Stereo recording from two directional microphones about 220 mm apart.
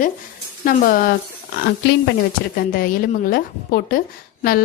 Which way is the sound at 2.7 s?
40° left (ahead or behind).